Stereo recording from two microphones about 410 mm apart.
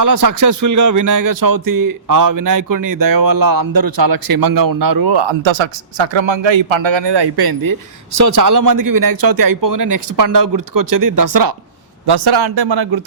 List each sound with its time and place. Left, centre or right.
0.0 s speech: right
12.0 s a man's voice: right